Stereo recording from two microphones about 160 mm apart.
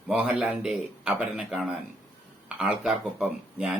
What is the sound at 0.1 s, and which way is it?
Speech, 10° right (ahead or behind).